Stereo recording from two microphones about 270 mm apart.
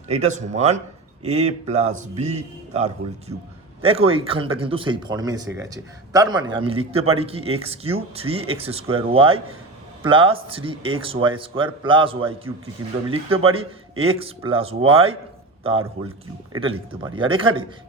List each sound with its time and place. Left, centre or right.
0.1 s speech: right
16.5 s speech: centre